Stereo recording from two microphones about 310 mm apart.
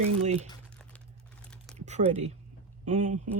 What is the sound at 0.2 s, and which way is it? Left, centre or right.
Speech, right.